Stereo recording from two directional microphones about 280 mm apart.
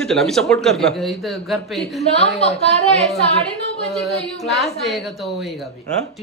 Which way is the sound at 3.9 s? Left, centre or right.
Centre.